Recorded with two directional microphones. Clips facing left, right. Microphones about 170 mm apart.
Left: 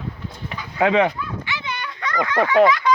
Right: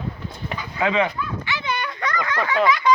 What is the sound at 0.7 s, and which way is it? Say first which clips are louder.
Speech: left 4 dB; 60° left (ahead or behind).